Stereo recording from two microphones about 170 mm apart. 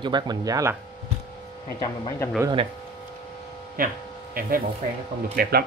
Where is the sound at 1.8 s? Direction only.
20° left (ahead or behind).